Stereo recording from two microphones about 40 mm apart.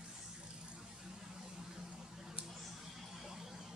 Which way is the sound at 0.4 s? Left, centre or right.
Right.